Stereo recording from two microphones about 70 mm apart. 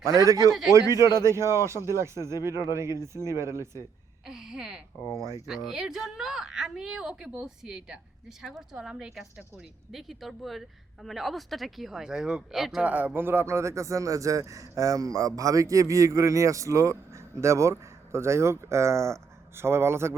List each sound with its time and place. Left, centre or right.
0.2 s speech: right
4.3 s a woman's voice: centre
12.8 s speech: right